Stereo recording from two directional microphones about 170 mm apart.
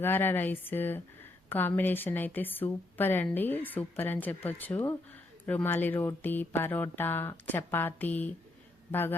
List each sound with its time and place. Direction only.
0.0 s a woman's voice: 10° left (ahead or behind)